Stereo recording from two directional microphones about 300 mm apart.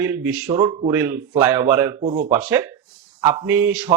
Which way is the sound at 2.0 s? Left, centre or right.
Right.